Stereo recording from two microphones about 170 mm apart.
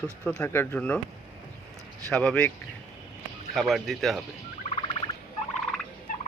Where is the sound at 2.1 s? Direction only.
5° left (ahead or behind).